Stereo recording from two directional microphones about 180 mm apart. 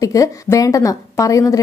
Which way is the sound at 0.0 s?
20° left (ahead or behind).